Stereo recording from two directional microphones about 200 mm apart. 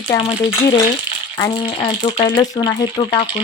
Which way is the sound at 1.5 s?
25° left (ahead or behind).